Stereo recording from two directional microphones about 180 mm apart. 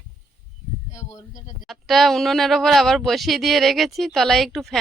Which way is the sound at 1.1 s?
20° left (ahead or behind).